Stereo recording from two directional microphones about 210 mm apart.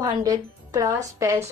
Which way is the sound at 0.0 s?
15° right (ahead or behind).